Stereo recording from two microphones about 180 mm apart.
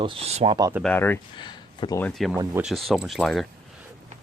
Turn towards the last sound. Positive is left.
turn(degrees=0)  # may be behind; listen again after turning